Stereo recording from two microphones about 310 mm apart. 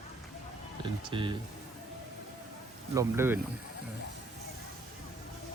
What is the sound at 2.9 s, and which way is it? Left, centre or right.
Speech, centre.